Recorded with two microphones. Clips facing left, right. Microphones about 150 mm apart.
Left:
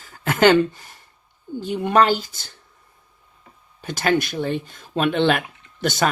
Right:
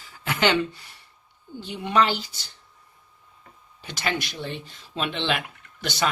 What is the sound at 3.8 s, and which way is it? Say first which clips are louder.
Speech: left 8 dB; 45° left (ahead or behind).